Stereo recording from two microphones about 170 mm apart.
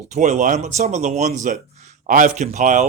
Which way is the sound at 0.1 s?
45° right (ahead or behind).